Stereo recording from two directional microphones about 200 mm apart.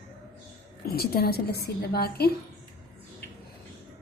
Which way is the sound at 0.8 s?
50° left (ahead or behind).